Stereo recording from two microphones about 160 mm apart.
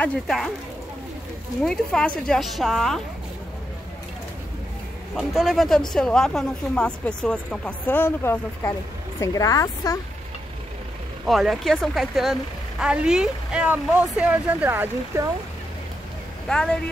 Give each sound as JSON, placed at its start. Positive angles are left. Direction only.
{"t": 0.0, "sound": "a woman's voice", "side_deg": 5}
{"t": 1.6, "sound": "a woman's voice", "side_deg": 5}
{"t": 5.1, "sound": "a woman's voice", "side_deg": 0}
{"t": 11.2, "sound": "a woman's voice", "side_deg": 0}
{"t": 16.4, "sound": "speech", "side_deg": 5}